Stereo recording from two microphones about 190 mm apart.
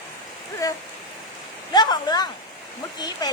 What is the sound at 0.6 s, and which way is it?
Speech, 15° left (ahead or behind).